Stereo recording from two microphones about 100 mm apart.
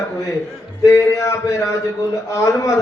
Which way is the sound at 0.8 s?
30° left (ahead or behind).